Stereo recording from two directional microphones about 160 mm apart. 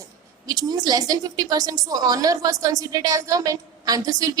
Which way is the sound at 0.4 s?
25° right (ahead or behind).